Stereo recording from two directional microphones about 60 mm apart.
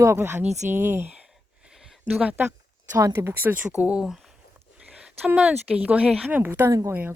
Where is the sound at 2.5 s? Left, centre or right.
Right.